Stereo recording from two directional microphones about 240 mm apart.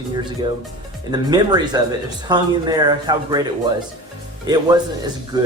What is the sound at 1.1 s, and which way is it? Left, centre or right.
Speech, centre.